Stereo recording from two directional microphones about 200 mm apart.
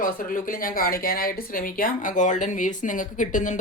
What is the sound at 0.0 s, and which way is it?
Speech, 45° left (ahead or behind).